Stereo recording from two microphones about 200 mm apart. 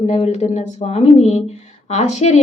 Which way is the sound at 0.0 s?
30° left (ahead or behind).